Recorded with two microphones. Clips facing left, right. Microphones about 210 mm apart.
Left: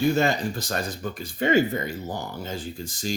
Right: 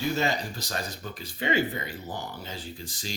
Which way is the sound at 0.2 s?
50° left (ahead or behind).